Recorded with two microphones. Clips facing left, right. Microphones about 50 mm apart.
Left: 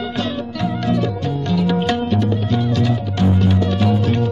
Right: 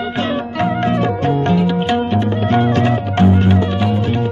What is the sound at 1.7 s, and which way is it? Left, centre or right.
Music, centre.